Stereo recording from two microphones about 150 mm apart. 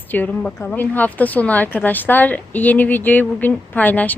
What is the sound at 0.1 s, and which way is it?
A woman's voice, 10° left (ahead or behind).